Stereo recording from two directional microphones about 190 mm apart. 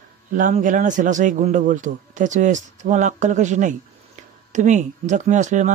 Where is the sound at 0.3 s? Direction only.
40° right (ahead or behind).